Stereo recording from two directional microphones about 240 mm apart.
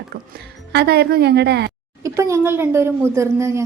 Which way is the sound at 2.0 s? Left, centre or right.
Centre.